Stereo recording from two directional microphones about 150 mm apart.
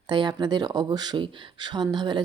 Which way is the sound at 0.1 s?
30° right (ahead or behind).